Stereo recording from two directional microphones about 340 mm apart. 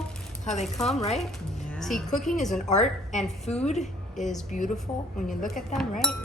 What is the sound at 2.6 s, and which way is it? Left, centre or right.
Speech, left.